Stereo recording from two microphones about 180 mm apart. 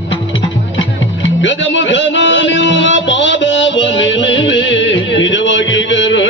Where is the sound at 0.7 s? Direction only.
90° left.